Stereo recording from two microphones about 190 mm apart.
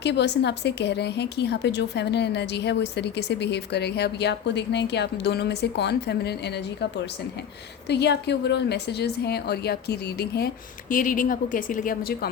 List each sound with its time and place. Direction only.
0.0 s a woman's voice: 65° left (ahead or behind)
7.9 s a woman's voice: 60° left (ahead or behind)